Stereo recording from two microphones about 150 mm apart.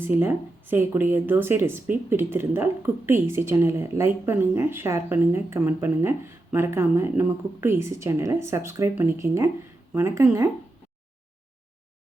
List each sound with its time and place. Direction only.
0.0 s speech: 15° right (ahead or behind)